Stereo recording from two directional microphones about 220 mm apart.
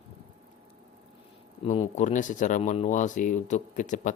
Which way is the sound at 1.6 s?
35° left (ahead or behind).